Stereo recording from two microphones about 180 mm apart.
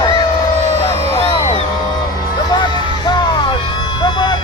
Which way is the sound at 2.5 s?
25° left (ahead or behind).